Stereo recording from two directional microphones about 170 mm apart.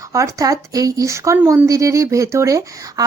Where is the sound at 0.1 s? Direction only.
20° right (ahead or behind).